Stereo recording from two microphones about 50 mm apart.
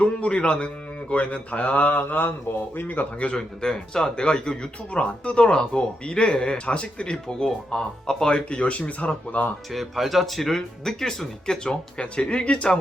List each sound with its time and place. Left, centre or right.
0.0 s a man's voice: left
3.2 s a man's voice: left
9.7 s speech: centre